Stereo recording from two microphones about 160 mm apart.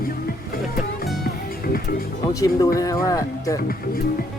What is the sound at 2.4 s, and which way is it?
Speech, 20° left (ahead or behind).